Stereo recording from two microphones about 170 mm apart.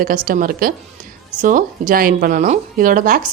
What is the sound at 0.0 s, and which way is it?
A woman's voice, 55° right (ahead or behind).